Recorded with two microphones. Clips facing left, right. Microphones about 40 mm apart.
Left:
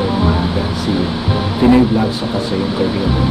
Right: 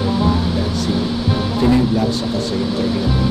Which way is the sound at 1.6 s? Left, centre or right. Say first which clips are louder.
Left 5 dB; left.